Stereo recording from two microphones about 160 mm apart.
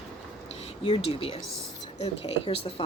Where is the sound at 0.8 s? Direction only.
35° left (ahead or behind).